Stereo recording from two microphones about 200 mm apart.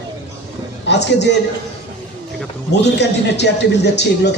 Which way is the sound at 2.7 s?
60° left (ahead or behind).